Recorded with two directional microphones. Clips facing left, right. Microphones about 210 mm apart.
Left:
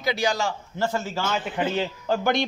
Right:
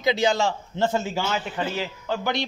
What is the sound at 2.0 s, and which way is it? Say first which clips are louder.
Speech: left 3 dB; 45° left (ahead or behind).